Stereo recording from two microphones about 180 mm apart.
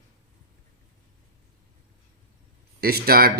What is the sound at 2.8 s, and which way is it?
Speech, 60° right (ahead or behind).